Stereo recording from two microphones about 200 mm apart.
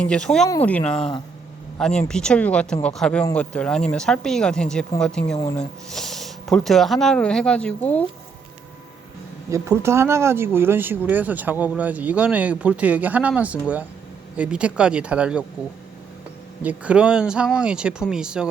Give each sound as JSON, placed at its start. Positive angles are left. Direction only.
{"t": 0.0, "sound": "speech", "side_deg": 5}
{"t": 0.9, "sound": "speech", "side_deg": 30}
{"t": 1.8, "sound": "speech", "side_deg": 5}
{"t": 9.5, "sound": "speech", "side_deg": -15}
{"t": 16.6, "sound": "speech", "side_deg": -5}